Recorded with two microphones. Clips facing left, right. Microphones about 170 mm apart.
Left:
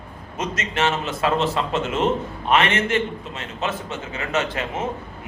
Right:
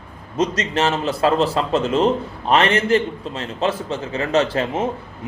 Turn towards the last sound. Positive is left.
turn(degrees=-35)  # may be behind; listen again after turning